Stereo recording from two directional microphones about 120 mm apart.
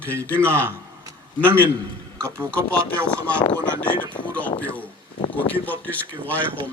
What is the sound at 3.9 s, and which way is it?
Speech, 40° left (ahead or behind).